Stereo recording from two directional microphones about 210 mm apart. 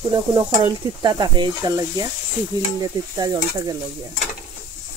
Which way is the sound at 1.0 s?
20° right (ahead or behind).